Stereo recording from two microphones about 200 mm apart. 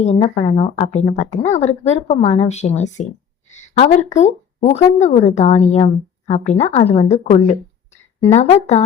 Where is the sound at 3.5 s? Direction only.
30° left (ahead or behind).